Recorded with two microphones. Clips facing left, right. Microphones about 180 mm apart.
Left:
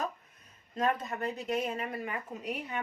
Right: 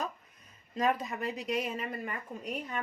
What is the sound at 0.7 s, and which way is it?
A woman's voice, 5° right (ahead or behind).